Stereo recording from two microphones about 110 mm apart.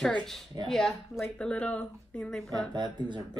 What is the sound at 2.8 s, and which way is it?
Speech, 45° right (ahead or behind).